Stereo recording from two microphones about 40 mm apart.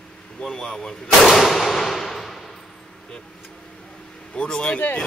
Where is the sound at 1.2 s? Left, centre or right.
Centre.